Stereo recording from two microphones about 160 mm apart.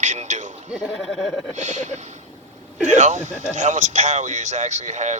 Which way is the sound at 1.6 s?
50° right (ahead or behind).